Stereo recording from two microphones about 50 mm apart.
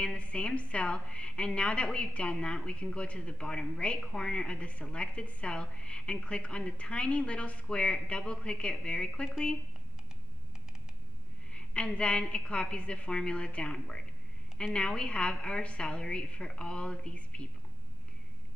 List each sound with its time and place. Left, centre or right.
0.0 s a woman's voice: left
11.5 s a woman's voice: left